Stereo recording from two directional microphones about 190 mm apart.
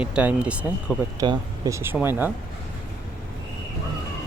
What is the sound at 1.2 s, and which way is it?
Speech, 20° right (ahead or behind).